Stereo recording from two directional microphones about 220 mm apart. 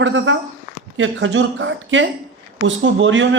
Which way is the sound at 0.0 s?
55° right (ahead or behind).